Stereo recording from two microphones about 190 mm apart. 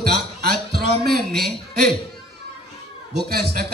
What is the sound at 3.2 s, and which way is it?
Speech, 55° right (ahead or behind).